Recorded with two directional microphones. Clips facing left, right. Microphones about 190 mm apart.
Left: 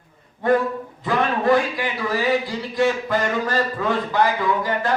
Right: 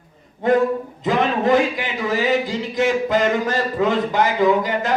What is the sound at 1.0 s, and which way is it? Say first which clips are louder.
A man's voice: right 1 dB; 20° right (ahead or behind).